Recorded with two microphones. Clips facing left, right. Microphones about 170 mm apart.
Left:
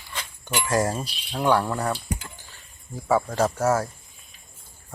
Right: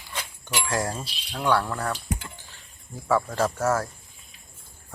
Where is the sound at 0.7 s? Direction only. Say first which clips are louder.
Left 6 dB; 20° left (ahead or behind).